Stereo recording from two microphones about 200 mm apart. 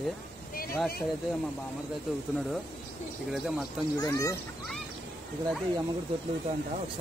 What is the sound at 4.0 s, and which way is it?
Speech, 15° left (ahead or behind).